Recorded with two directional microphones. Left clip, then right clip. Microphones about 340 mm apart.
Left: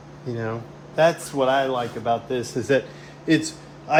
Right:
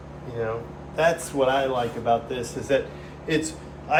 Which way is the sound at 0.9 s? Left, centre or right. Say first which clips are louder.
Left 2 dB; left.